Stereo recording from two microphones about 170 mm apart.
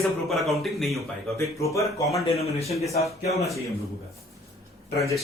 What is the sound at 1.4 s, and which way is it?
Speech, 20° left (ahead or behind).